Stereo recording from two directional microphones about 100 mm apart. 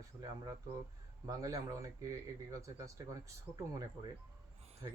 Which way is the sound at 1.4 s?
35° right (ahead or behind).